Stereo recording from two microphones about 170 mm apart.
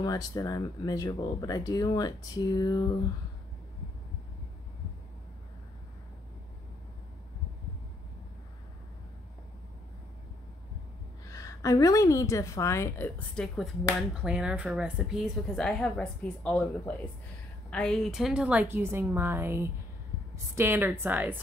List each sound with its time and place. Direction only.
0.0 s speech: 20° left (ahead or behind)
11.3 s a woman's voice: 20° left (ahead or behind)
14.2 s a woman's voice: 5° right (ahead or behind)